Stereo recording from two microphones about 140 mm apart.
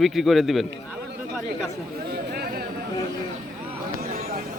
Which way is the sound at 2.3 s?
90° right.